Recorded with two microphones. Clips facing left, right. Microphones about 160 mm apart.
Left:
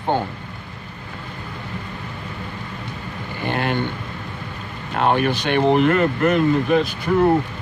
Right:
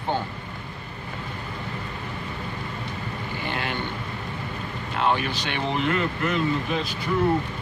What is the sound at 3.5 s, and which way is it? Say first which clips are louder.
Speech: left 9 dB; 50° left (ahead or behind).